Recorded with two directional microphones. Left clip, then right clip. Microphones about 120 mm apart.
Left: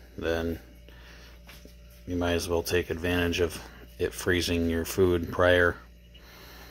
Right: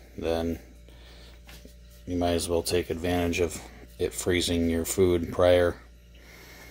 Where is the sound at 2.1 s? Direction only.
40° right (ahead or behind).